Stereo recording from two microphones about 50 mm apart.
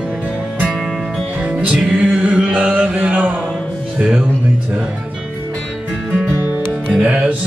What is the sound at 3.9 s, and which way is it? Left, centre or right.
Speech, right.